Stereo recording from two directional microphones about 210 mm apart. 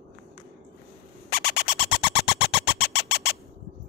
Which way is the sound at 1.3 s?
50° left (ahead or behind).